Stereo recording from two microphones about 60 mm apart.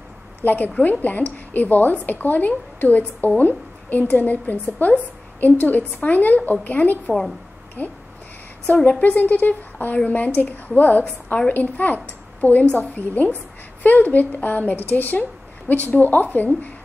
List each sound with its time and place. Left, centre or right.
0.4 s a woman's voice: left